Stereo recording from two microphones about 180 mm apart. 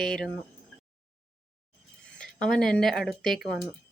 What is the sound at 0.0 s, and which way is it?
Speech, 5° left (ahead or behind).